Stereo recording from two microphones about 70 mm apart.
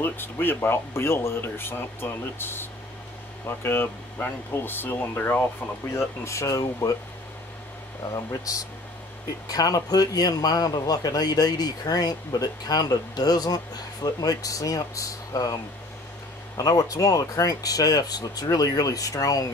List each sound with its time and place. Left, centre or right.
0.0 s speech: left
5.9 s speech: left
8.1 s a man's voice: left